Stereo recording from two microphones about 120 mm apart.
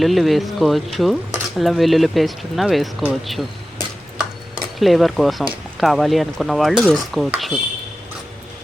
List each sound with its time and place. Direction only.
0.0 s speech: centre (ahead or behind)
4.5 s speech: centre (ahead or behind)